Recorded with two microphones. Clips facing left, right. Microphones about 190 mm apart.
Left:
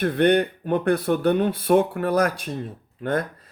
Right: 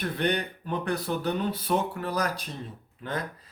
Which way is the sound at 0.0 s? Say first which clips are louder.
Left 9 dB; 55° left (ahead or behind).